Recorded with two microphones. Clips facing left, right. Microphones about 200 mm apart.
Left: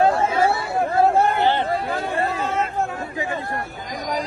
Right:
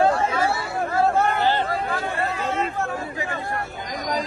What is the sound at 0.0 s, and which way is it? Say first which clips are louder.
Chatter: left 2 dB; 25° left (ahead or behind).